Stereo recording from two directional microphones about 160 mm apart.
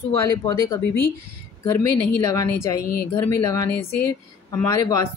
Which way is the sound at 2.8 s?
75° left (ahead or behind).